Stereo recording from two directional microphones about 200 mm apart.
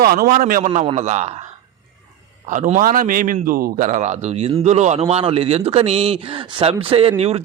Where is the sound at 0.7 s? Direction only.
35° right (ahead or behind).